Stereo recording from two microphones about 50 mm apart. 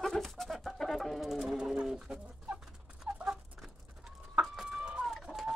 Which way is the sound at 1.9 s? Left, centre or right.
Centre.